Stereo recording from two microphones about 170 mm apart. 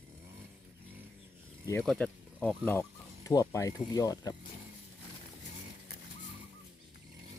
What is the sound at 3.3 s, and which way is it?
Speech, 20° left (ahead or behind).